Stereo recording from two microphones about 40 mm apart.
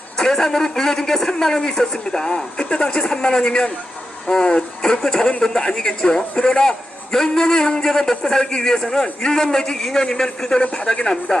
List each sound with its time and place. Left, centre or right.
0.2 s a man's voice: centre
10.6 s speech: left
10.8 s speech: left